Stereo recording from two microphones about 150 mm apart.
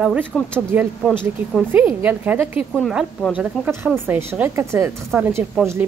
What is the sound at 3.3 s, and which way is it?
A woman's voice, 15° right (ahead or behind).